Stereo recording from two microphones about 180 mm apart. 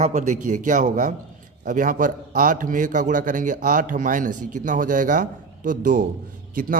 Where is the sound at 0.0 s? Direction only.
40° right (ahead or behind).